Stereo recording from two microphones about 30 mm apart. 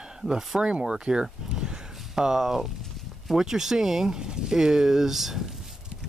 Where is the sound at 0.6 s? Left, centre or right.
Right.